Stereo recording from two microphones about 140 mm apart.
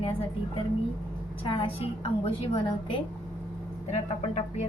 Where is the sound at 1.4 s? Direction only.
35° left (ahead or behind).